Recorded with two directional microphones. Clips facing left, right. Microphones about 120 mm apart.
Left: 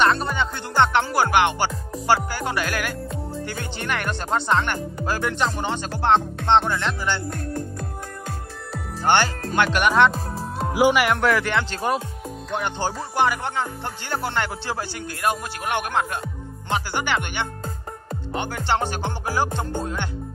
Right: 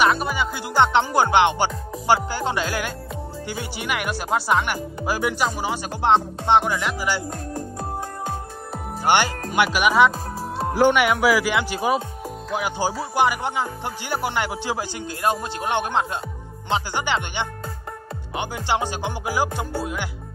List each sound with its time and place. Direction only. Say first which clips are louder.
0.0 s music: even; 5° right (ahead or behind)
0.9 s speech: right 2 dB; 20° right (ahead or behind)
3.4 s music: right 3 dB; 10° right (ahead or behind)
9.0 s speech: even; 15° right (ahead or behind)
12.4 s music: right 1 dB; 5° right (ahead or behind)